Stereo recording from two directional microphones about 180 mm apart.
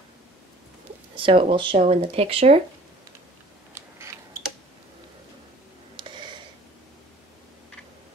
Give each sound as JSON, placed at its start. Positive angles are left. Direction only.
{"t": 1.1, "sound": "speech", "side_deg": -30}
{"t": 3.7, "sound": "mechanisms", "side_deg": -15}
{"t": 5.9, "sound": "a sound", "side_deg": -25}